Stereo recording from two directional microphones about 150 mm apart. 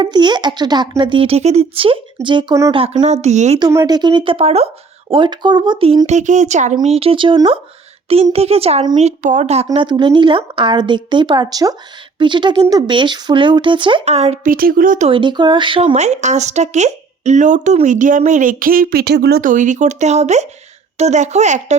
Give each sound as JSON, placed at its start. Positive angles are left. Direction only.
{"t": 0.0, "sound": "speech", "side_deg": -30}
{"t": 3.6, "sound": "speech", "side_deg": -25}
{"t": 6.1, "sound": "speech", "side_deg": -50}
{"t": 6.8, "sound": "speech", "side_deg": -40}
{"t": 9.6, "sound": "speech", "side_deg": -30}
{"t": 14.0, "sound": "speech", "side_deg": -45}
{"t": 14.4, "sound": "speech", "side_deg": -75}
{"t": 15.0, "sound": "speech", "side_deg": -35}
{"t": 16.0, "sound": "speech", "side_deg": -50}